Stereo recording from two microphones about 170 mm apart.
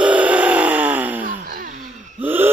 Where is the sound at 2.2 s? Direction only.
10° right (ahead or behind).